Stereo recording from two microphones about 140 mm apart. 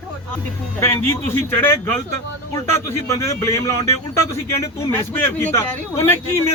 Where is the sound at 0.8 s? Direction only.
20° left (ahead or behind).